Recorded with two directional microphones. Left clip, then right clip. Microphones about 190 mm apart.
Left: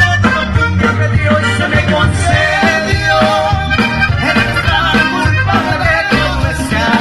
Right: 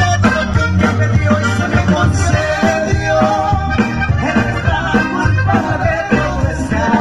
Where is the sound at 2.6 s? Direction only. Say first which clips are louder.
Left 3 dB; 55° right (ahead or behind).